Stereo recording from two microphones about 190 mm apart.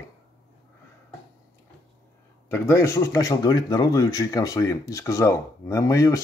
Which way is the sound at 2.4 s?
15° left (ahead or behind).